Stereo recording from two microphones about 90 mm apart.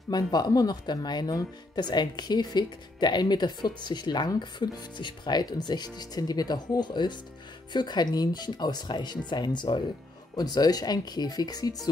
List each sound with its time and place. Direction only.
0.1 s speech: 45° left (ahead or behind)